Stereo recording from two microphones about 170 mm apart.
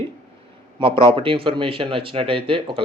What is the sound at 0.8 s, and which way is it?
Speech, 35° right (ahead or behind).